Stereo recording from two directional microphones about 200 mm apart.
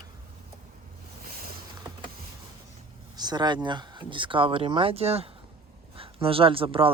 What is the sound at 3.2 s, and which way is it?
Speech, 20° right (ahead or behind).